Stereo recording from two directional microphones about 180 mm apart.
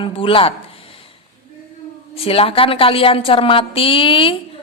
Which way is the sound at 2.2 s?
30° left (ahead or behind).